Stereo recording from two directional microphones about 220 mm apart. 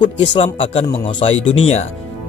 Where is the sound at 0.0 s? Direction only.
20° left (ahead or behind).